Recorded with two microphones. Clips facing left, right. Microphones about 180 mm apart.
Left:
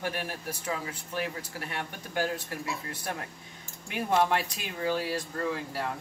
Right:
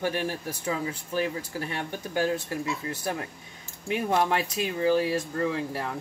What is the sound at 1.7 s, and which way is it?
Cutlery, 25° right (ahead or behind).